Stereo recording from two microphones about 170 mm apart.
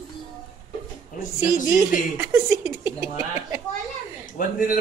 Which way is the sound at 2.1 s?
15° right (ahead or behind).